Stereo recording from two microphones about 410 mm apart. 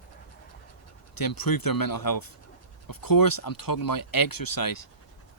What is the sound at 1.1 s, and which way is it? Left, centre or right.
Speech, left.